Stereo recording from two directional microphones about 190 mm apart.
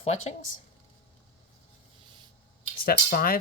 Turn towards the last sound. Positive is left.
turn(degrees=50)  # may be behind; listen again after turning